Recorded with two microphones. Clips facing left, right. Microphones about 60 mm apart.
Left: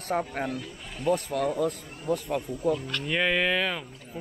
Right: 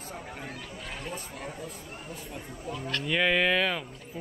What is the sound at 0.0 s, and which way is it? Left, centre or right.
Speech, left.